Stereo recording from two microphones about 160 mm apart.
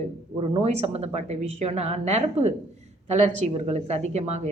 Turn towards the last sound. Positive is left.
turn(degrees=-40)  # may be behind; listen again after turning